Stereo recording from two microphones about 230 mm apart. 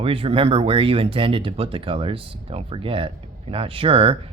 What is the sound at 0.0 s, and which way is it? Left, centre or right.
Speech, right.